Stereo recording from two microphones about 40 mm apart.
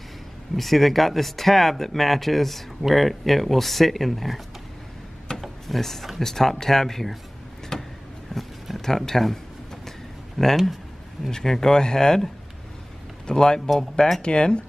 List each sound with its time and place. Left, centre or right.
0.6 s speech: centre
5.4 s speech: centre
7.7 s vehicle: centre
8.4 s a sound: centre
8.8 s speech: centre
10.4 s speech: centre
13.3 s speech: centre
14.2 s speech: left